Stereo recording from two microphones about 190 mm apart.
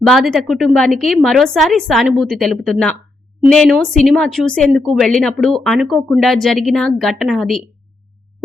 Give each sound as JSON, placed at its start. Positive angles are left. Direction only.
{"t": 0.1, "sound": "speech", "side_deg": 0}